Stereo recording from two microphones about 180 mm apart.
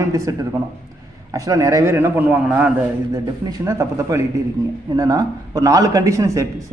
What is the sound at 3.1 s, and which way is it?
A man's voice, 20° right (ahead or behind).